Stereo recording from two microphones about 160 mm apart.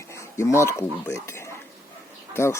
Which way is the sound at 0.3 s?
15° left (ahead or behind).